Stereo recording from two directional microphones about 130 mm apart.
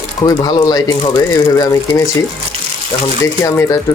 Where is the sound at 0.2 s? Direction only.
30° left (ahead or behind).